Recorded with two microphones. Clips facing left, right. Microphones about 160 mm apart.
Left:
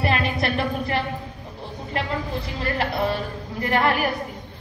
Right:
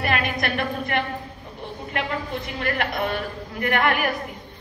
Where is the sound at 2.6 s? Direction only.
30° left (ahead or behind).